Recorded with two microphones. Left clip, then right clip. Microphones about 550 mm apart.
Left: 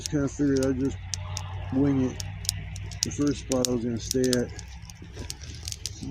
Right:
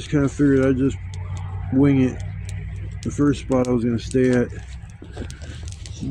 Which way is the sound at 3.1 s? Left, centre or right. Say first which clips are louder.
Right 9 dB; left.